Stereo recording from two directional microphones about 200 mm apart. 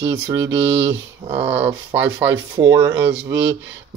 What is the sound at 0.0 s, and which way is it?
Speech, 15° right (ahead or behind).